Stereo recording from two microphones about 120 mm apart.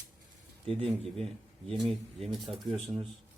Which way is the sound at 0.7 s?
55° right (ahead or behind).